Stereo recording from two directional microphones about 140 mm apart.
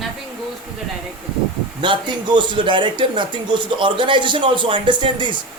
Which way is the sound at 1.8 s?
35° right (ahead or behind).